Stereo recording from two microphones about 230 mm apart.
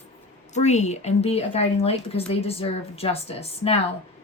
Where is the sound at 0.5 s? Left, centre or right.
Left.